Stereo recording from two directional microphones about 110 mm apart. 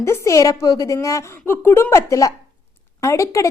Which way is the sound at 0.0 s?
25° left (ahead or behind).